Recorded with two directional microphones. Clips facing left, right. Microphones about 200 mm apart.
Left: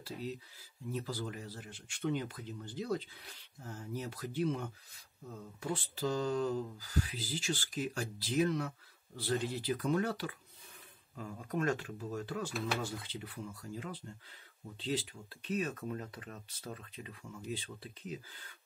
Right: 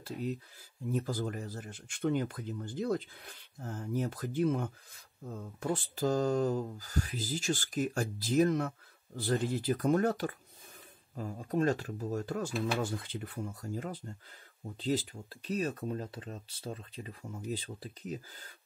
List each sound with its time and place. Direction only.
0.0 s speech: 50° right (ahead or behind)
11.1 s speech: 35° right (ahead or behind)